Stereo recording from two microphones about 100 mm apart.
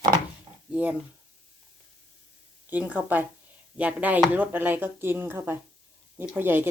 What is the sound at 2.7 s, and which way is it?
Speech, 15° right (ahead or behind).